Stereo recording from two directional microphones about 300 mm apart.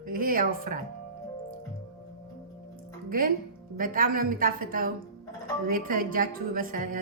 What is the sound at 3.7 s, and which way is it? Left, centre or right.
A woman's voice, right.